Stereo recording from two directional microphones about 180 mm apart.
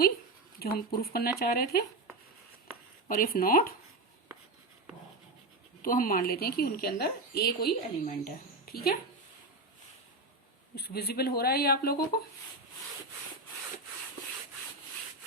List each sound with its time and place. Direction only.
0.6 s a woman's voice: 60° left (ahead or behind)
3.1 s speech: 55° left (ahead or behind)
5.8 s a woman's voice: 50° left (ahead or behind)
10.8 s a woman's voice: 60° left (ahead or behind)